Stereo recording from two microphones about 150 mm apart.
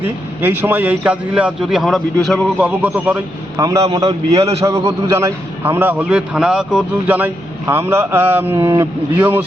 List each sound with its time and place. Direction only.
0.0 s a man's voice: 15° right (ahead or behind)
3.6 s a man's voice: 20° right (ahead or behind)
4.3 s a man's voice: 45° right (ahead or behind)
4.6 s a man's voice: 20° right (ahead or behind)